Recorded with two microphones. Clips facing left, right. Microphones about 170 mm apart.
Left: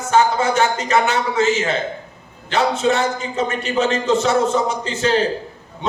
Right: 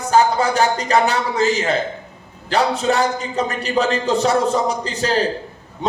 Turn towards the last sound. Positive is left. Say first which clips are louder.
# left 1 dB
turn(degrees=-35)  # may be behind; listen again after turning